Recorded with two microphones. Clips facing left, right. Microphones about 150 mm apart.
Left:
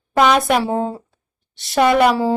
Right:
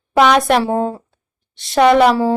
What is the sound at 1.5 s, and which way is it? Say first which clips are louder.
Speech: right 3 dB; centre (ahead or behind).